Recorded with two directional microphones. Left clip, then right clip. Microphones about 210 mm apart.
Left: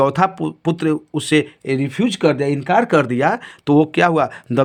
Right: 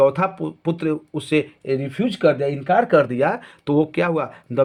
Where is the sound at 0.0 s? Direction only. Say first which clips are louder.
Left 1 dB; 40° left (ahead or behind).